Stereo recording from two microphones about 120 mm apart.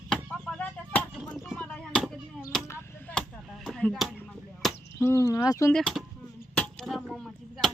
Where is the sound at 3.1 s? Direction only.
15° left (ahead or behind).